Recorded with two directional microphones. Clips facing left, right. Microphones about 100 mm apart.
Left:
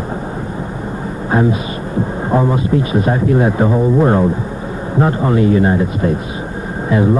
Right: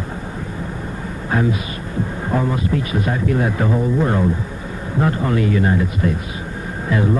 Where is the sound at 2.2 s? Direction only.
25° left (ahead or behind).